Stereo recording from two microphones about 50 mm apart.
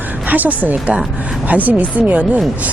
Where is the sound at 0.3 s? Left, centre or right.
Right.